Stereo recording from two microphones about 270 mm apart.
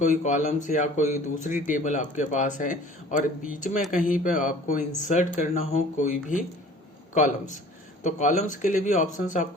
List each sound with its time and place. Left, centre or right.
0.0 s speech: left